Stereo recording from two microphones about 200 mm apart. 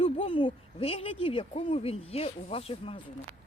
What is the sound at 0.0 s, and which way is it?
Speech, 30° left (ahead or behind).